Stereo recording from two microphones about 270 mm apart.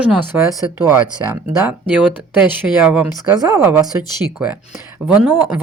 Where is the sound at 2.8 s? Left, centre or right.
Centre.